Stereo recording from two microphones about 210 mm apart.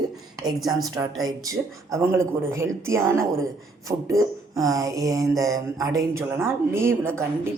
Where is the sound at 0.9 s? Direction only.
15° right (ahead or behind).